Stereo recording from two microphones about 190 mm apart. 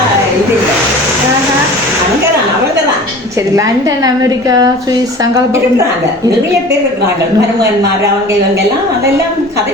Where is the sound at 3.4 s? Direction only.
15° right (ahead or behind).